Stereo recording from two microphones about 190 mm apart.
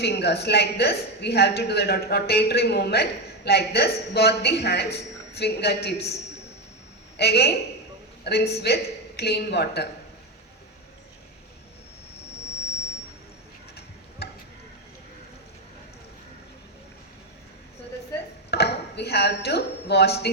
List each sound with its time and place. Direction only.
0.0 s a woman's voice: 60° left (ahead or behind)
7.2 s a woman's voice: 60° left (ahead or behind)
14.2 s tick-tock: 60° left (ahead or behind)
18.5 s a sound: 60° left (ahead or behind)